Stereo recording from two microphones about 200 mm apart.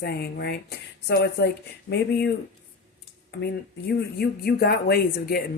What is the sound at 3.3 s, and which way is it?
A woman's voice, 55° left (ahead or behind).